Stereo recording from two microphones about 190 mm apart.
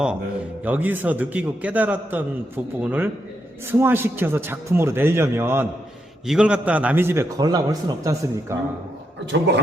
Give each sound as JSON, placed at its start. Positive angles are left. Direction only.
{"t": 0.6, "sound": "a man's voice", "side_deg": -10}
{"t": 9.2, "sound": "a man's voice", "side_deg": -65}